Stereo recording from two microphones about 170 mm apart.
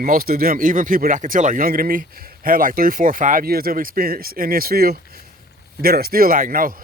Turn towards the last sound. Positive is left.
turn(degrees=-55)  # may be behind; listen again after turning